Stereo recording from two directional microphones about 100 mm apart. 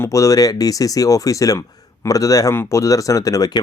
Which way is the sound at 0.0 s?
30° left (ahead or behind).